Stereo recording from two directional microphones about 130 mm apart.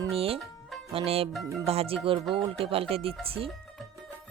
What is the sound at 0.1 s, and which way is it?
Speech, 50° right (ahead or behind).